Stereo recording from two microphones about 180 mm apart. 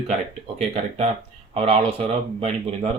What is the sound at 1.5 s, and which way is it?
Speech, 35° right (ahead or behind).